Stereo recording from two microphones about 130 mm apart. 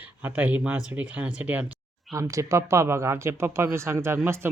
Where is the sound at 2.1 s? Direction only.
25° right (ahead or behind).